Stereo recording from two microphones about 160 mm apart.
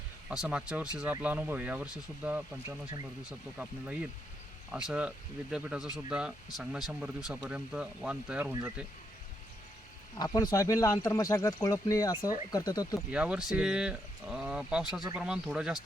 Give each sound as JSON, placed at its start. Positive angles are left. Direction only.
{"t": 0.3, "sound": "speech", "side_deg": -5}
{"t": 10.2, "sound": "speech", "side_deg": 25}
{"t": 13.1, "sound": "speech", "side_deg": -5}